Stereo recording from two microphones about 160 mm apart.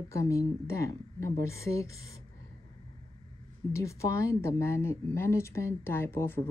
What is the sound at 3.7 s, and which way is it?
A woman's voice, 20° left (ahead or behind).